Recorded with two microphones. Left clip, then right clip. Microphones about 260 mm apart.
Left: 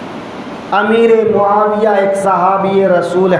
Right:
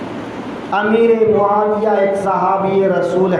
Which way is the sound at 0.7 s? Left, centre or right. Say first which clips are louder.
Left 3 dB; left.